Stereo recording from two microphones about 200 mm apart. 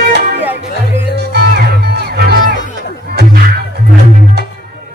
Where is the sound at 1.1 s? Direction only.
55° right (ahead or behind).